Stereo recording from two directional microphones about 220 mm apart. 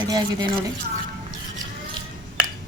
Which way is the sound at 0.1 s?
20° right (ahead or behind).